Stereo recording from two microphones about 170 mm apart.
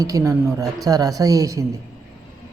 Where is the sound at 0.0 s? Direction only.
20° right (ahead or behind).